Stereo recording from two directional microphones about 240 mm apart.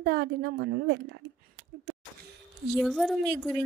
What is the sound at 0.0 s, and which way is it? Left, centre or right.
A woman's voice, right.